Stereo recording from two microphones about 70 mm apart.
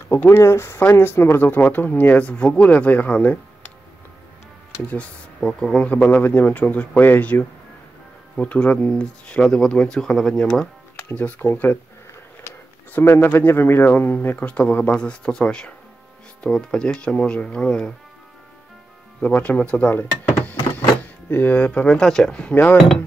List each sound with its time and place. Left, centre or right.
0.4 s speech: left
4.8 s speech: centre
5.4 s speech: centre
6.0 s speech: left
11.1 s speech: left
12.9 s speech: left; by 17.9 s centre
19.2 s speech: centre